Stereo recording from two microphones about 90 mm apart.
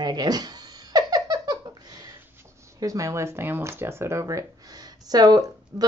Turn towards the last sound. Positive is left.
turn(degrees=-45)  # may be behind; listen again after turning